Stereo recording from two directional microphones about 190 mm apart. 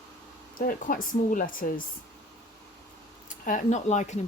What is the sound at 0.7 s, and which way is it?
Speech, 45° left (ahead or behind).